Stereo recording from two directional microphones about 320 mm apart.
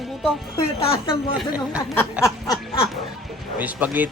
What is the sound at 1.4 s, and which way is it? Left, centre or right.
Speech, centre.